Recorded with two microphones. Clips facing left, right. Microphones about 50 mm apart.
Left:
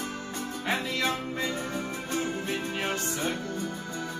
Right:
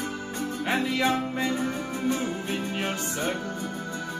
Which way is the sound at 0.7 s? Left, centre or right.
Right.